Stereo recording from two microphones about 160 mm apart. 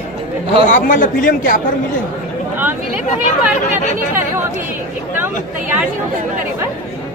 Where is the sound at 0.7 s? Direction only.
55° left (ahead or behind).